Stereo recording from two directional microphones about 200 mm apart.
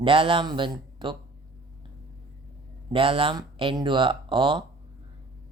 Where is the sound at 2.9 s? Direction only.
25° right (ahead or behind).